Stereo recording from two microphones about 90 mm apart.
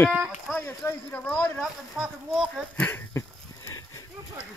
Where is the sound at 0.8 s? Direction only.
20° left (ahead or behind).